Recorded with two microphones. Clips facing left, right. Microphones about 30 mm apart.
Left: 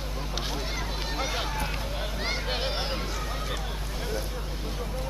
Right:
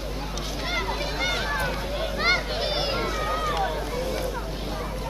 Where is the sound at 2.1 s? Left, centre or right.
Right.